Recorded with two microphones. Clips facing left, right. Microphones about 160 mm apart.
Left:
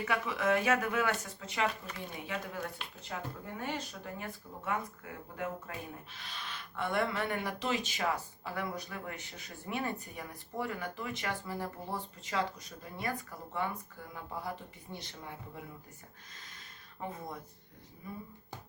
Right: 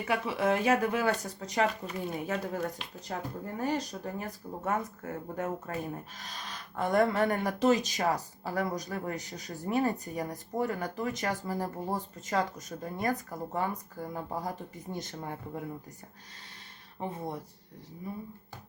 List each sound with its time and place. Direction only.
0.0 s speech: 30° right (ahead or behind); by 15.4 s 45° right (ahead or behind)
17.0 s speech: 30° right (ahead or behind)